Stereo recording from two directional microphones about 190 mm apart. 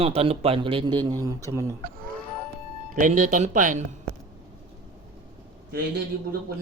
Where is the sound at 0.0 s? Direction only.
30° right (ahead or behind); by 1.7 s 15° right (ahead or behind).